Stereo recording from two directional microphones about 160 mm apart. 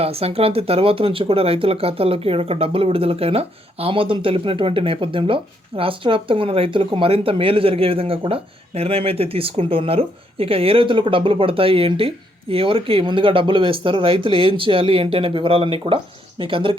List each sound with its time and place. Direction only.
0.0 s speech: 40° right (ahead or behind)